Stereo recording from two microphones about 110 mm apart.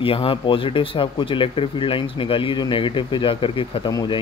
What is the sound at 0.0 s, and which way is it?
Speech, 55° left (ahead or behind).